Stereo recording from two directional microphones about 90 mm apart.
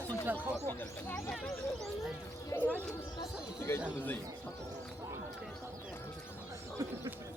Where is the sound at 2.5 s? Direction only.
30° left (ahead or behind).